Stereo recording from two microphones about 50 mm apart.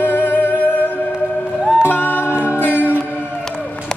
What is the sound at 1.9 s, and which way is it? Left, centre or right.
Music, left.